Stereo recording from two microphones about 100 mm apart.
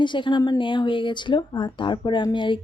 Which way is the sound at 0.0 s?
50° left (ahead or behind).